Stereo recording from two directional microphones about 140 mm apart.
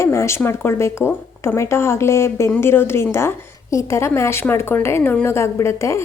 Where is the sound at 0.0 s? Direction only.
20° left (ahead or behind).